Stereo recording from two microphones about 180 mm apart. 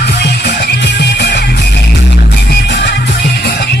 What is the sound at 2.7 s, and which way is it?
Music, 75° left (ahead or behind).